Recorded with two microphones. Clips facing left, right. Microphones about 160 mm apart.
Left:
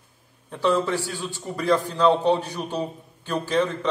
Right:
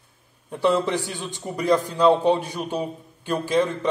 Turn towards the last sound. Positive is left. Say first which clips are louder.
# right 2 dB
turn(degrees=-15)  # may be behind; listen again after turning